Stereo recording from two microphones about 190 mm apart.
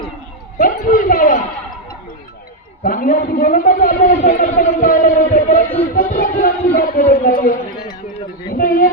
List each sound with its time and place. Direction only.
0.6 s a man's voice: 45° left (ahead or behind)
2.8 s a man's voice: 45° left (ahead or behind)
8.5 s a sound: 45° left (ahead or behind)